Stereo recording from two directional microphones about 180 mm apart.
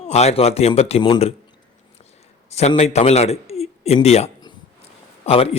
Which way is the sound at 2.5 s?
35° left (ahead or behind).